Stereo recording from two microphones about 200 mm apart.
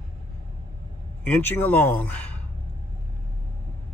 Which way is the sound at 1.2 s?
10° left (ahead or behind).